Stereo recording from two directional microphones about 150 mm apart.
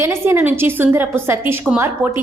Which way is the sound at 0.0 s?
15° right (ahead or behind).